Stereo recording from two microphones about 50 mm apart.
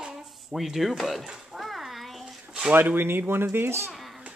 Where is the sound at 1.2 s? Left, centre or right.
Centre.